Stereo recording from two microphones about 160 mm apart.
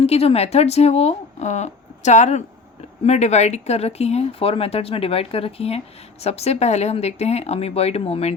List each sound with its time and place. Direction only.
0.0 s speech: 40° left (ahead or behind)